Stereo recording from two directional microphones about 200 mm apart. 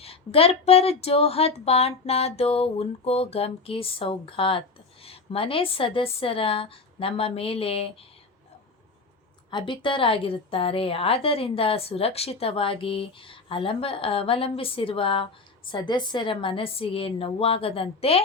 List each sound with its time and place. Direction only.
0.0 s a woman's voice: 30° left (ahead or behind)
9.5 s a woman's voice: 25° left (ahead or behind)